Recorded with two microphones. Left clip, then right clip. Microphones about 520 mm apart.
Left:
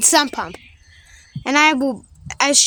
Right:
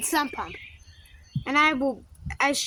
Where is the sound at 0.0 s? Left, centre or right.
Centre.